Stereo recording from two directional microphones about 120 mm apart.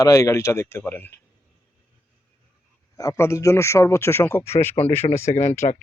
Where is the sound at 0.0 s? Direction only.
25° left (ahead or behind).